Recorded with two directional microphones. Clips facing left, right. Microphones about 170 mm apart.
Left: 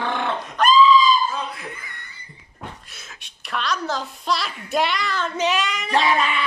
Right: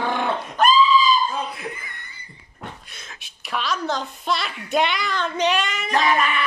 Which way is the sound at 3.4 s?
Centre (ahead or behind).